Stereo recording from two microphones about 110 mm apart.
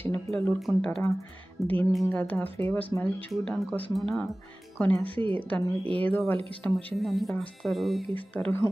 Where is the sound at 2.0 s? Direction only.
15° left (ahead or behind); by 4.2 s centre (ahead or behind).